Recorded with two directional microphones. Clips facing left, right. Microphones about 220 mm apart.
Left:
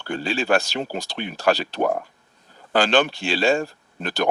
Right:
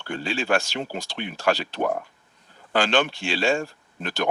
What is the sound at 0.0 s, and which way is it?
Speech, 35° left (ahead or behind).